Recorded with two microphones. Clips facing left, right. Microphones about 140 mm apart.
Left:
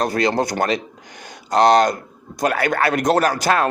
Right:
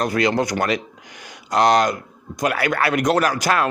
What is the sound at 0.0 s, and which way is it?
Speech, 30° left (ahead or behind).